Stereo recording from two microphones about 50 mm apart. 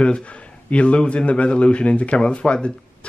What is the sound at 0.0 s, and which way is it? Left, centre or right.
A man's voice, left.